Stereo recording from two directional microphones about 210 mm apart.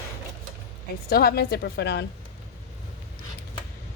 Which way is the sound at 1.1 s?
45° left (ahead or behind).